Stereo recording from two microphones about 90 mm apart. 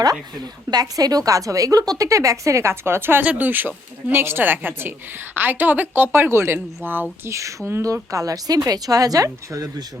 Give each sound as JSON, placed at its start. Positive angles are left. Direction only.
{"t": 0.7, "sound": "a woman's voice", "side_deg": -45}
{"t": 7.3, "sound": "a woman's voice", "side_deg": -35}
{"t": 8.1, "sound": "a woman's voice", "side_deg": -40}